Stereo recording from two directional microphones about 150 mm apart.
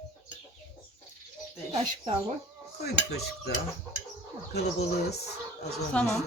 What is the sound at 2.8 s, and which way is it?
Speech, 90° left.